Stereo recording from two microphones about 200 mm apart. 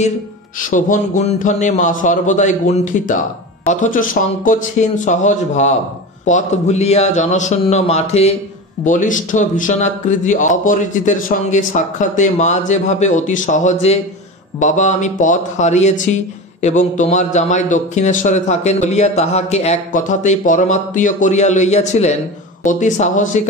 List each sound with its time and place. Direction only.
0.6 s a man's voice: 40° left (ahead or behind)